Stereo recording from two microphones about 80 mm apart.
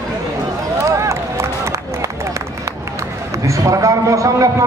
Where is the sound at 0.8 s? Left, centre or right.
Right.